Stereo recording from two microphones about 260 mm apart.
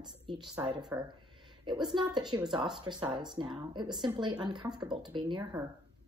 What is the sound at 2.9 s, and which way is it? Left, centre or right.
Speech, centre.